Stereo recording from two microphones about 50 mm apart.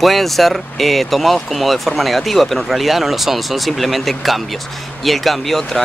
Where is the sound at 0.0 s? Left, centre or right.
Centre.